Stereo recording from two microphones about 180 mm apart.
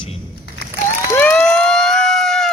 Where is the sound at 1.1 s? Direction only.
10° left (ahead or behind).